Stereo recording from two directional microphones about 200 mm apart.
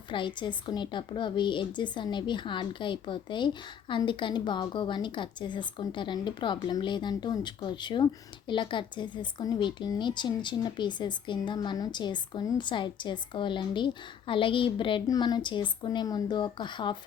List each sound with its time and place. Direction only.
0.1 s a woman's voice: 25° left (ahead or behind)